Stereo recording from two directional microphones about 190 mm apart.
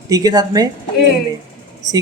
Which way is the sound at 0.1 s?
20° right (ahead or behind).